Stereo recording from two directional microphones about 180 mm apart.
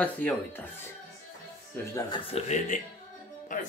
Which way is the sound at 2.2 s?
35° left (ahead or behind).